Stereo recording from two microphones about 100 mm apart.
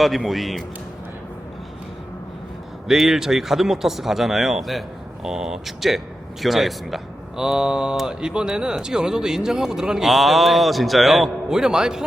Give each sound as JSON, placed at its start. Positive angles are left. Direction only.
{"t": 0.0, "sound": "speech", "side_deg": 0}
{"t": 2.8, "sound": "speech", "side_deg": -5}